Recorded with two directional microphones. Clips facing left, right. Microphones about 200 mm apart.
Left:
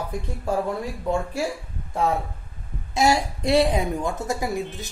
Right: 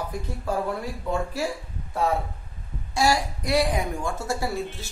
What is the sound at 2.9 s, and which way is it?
A woman's voice, 20° left (ahead or behind).